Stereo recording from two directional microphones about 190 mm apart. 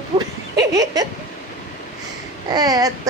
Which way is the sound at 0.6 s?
15° right (ahead or behind).